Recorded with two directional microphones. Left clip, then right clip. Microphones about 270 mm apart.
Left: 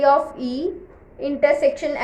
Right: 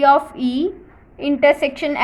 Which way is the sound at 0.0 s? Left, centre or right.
Right.